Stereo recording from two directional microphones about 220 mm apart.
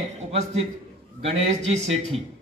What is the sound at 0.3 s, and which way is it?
A man's voice, 25° right (ahead or behind).